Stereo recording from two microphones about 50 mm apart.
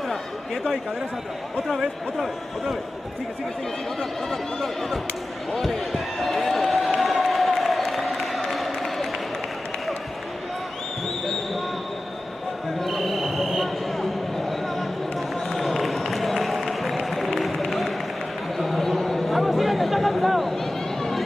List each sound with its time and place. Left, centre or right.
1.7 s speech: centre
4.0 s speech: centre
7.0 s a sound: centre
12.7 s basketball bounce: centre
14.5 s run: centre
18.6 s a sound: centre